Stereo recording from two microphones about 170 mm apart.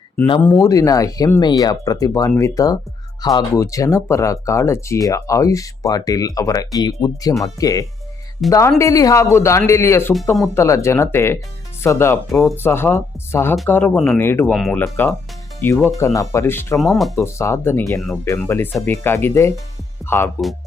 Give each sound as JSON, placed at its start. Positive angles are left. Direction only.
{"t": 0.4, "sound": "speech", "side_deg": 15}
{"t": 16.7, "sound": "speech", "side_deg": 0}
{"t": 17.2, "sound": "speech", "side_deg": 15}